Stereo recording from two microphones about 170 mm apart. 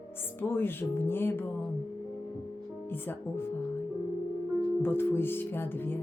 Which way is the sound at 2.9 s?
10° left (ahead or behind).